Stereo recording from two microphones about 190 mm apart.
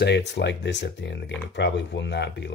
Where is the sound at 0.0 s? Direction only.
65° left (ahead or behind).